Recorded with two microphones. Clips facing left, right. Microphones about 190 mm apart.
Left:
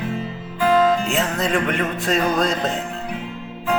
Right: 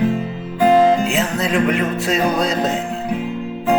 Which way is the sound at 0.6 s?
30° right (ahead or behind).